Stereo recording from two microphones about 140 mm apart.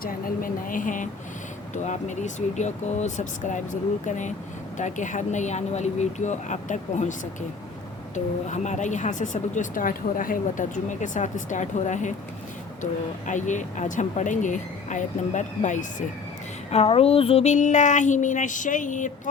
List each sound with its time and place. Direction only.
0.0 s speech: 80° left
1.7 s speech: 60° left (ahead or behind)
16.7 s speech: 45° left (ahead or behind); by 19.3 s 65° left (ahead or behind)